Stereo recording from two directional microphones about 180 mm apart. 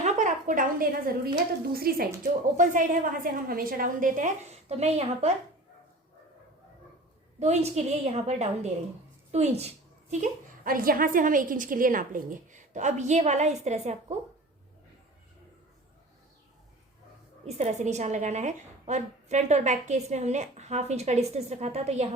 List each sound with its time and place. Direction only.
0.0 s a woman's voice: 40° right (ahead or behind)
7.3 s a woman's voice: 40° right (ahead or behind)
17.4 s a woman's voice: 40° right (ahead or behind)